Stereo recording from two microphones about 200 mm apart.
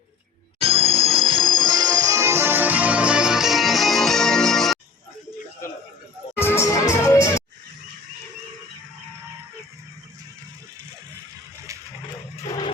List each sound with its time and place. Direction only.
0.6 s music: 25° right (ahead or behind); by 4.8 s centre (ahead or behind)
6.4 s music: 15° left (ahead or behind)
12.5 s a sound: 20° left (ahead or behind)